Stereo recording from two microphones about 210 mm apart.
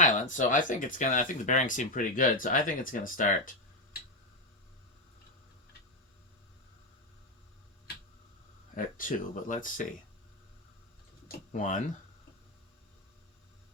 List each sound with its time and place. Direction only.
0.0 s speech: 35° left (ahead or behind)
8.7 s speech: 40° left (ahead or behind)
11.3 s speech: 35° left (ahead or behind)